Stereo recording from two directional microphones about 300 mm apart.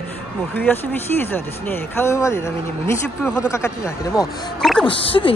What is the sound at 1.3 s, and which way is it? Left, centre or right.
Speech, centre.